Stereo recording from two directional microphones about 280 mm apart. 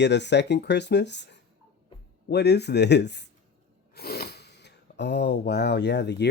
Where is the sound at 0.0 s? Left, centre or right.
Left.